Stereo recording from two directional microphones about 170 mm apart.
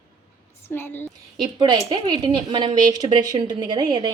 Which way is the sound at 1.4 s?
25° right (ahead or behind).